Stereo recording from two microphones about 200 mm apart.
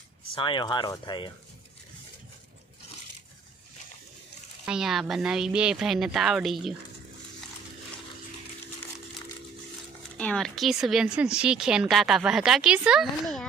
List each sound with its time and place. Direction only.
0.3 s speech: 25° left (ahead or behind)
4.6 s speech: 5° right (ahead or behind)
10.2 s speech: 5° left (ahead or behind)